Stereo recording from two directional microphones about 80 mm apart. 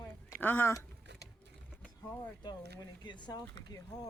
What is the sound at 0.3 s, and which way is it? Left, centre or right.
Speech, left.